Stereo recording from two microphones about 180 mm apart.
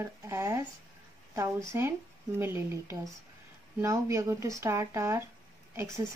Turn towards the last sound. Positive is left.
turn(degrees=-15)  # may be behind; listen again after turning